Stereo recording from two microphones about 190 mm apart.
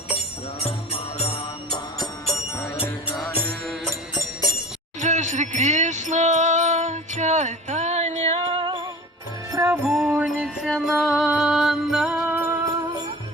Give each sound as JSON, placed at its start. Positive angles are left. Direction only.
{"t": 3.2, "sound": "music", "side_deg": 5}
{"t": 4.9, "sound": "music", "side_deg": -40}
{"t": 9.5, "sound": "music", "side_deg": -15}